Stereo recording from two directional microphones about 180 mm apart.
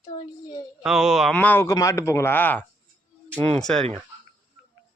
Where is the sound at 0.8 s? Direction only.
5° right (ahead or behind).